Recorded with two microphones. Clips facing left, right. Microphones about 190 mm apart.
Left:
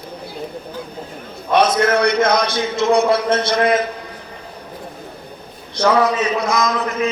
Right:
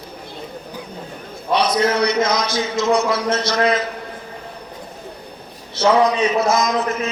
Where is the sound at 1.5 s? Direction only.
50° left (ahead or behind).